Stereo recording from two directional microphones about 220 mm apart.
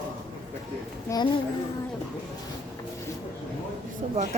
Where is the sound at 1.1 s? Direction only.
15° left (ahead or behind).